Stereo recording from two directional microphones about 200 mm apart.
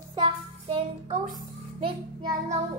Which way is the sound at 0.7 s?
25° right (ahead or behind).